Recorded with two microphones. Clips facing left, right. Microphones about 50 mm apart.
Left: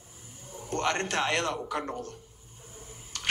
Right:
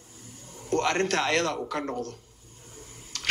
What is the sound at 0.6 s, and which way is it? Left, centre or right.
Speech, right.